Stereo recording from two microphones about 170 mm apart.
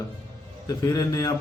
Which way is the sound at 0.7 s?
20° left (ahead or behind).